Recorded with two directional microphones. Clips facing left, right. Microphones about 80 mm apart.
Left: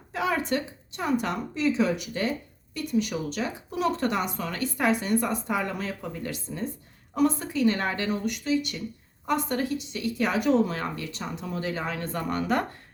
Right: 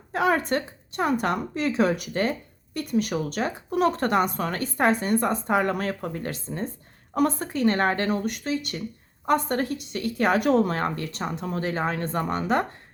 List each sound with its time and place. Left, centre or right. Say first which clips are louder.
0.1 s a woman's voice: right 4 dB; right
12.0 s speech: right 2 dB; right